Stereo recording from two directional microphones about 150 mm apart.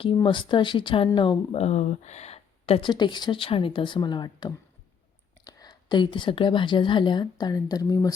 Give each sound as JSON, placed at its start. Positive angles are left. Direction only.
{"t": 0.0, "sound": "speech", "side_deg": 35}
{"t": 1.5, "sound": "speech", "side_deg": 45}